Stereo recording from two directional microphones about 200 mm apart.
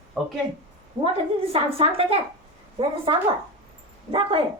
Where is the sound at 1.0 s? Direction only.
25° right (ahead or behind).